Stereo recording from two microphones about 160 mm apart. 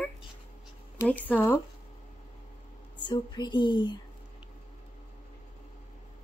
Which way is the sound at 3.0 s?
30° left (ahead or behind).